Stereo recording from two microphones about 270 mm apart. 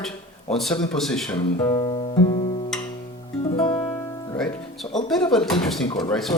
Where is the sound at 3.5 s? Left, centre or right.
Centre.